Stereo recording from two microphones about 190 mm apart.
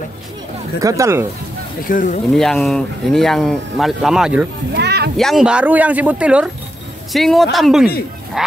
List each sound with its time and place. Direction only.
0.7 s speech: 15° right (ahead or behind)
1.9 s speech: 45° left (ahead or behind)
2.3 s speech: centre (ahead or behind)
4.7 s a sound: 60° right (ahead or behind)
5.1 s speech: centre (ahead or behind)